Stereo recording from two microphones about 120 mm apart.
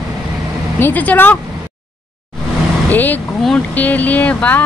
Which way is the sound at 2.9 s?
15° left (ahead or behind).